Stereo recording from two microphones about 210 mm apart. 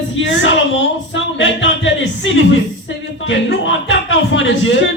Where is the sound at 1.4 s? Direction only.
65° left (ahead or behind).